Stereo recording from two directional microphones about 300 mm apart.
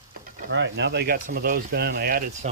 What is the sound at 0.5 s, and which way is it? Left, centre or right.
Speech, right.